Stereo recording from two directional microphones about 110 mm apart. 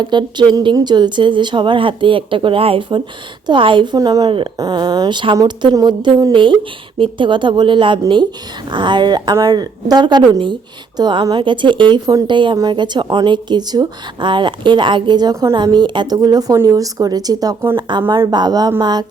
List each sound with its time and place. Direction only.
0.0 s speech: 45° right (ahead or behind)
3.9 s a woman's voice: 35° right (ahead or behind)